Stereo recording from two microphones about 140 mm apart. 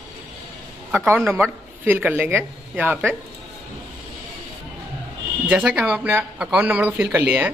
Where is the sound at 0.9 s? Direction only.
15° right (ahead or behind).